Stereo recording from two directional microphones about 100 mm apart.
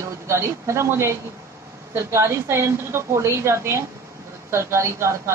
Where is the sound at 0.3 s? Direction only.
30° right (ahead or behind).